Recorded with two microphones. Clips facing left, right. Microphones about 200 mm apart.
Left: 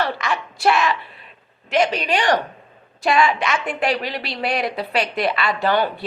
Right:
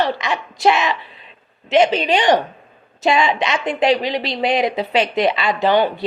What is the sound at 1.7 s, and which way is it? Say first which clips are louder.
A woman's voice: right 5 dB; 25° right (ahead or behind).